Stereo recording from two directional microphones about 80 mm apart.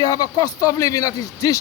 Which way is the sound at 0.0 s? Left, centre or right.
Left.